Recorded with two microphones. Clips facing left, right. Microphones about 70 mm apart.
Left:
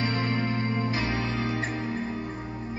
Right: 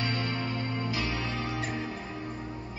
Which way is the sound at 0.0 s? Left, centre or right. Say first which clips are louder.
Left 4 dB; left.